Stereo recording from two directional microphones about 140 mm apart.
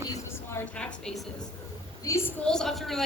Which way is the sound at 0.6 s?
10° left (ahead or behind).